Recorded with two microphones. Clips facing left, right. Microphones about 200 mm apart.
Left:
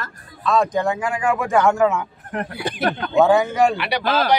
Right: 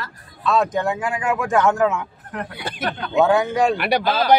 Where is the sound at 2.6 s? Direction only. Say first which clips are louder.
Left 4 dB; 15° left (ahead or behind).